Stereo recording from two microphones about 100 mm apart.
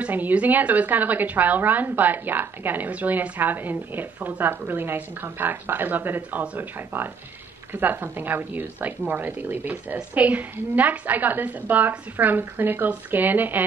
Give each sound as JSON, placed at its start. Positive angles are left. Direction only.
{"t": 0.0, "sound": "a woman's voice", "side_deg": -15}